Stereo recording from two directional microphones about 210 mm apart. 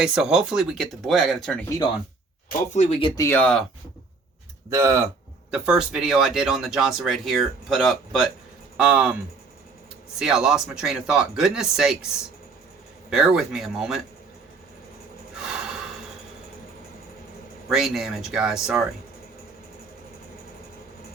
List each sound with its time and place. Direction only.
0.0 s speech: 5° right (ahead or behind)
2.5 s speech: 35° left (ahead or behind)
3.2 s speech: 10° left (ahead or behind)
4.7 s speech: 15° right (ahead or behind)
10.2 s speech: 5° right (ahead or behind)
13.1 s speech: 5° right (ahead or behind)
17.7 s speech: centre (ahead or behind)